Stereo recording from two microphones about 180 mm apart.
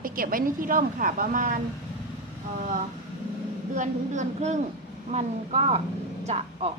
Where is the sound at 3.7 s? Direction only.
45° right (ahead or behind).